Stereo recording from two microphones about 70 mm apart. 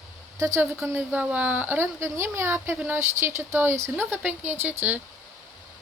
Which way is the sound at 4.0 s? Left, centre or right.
Right.